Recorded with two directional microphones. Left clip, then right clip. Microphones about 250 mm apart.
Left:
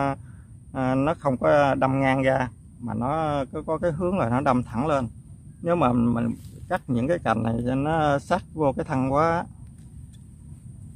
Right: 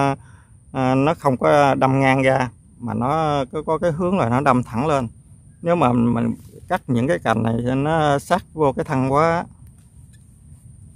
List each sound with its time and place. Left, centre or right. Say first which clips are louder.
0.7 s a man's voice: right 6 dB; right